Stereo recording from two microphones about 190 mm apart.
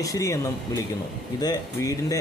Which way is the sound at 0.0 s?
15° left (ahead or behind).